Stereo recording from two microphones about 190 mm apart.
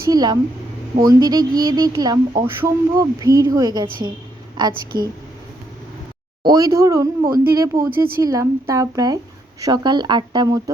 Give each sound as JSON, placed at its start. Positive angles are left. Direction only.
{"t": 0.1, "sound": "a woman's voice", "side_deg": -20}
{"t": 4.9, "sound": "a woman's voice", "side_deg": -20}
{"t": 6.4, "sound": "speech", "side_deg": -20}
{"t": 7.9, "sound": "speech", "side_deg": -50}
{"t": 8.2, "sound": "a woman's voice", "side_deg": -15}